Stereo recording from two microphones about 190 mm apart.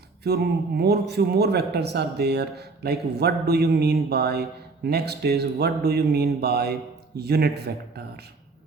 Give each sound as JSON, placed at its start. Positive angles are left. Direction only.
{"t": 0.3, "sound": "a man's voice", "side_deg": -55}